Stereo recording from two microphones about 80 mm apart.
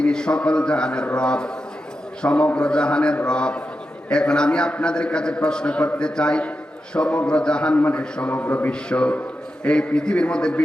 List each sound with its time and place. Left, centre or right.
0.0 s a man's voice: centre